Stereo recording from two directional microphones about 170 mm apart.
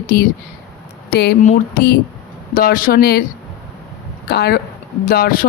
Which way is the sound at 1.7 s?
60° left (ahead or behind).